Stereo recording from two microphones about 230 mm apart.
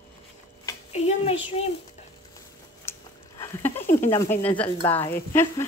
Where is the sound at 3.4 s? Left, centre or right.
Centre.